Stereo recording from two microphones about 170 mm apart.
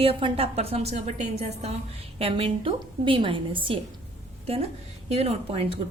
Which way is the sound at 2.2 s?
35° right (ahead or behind).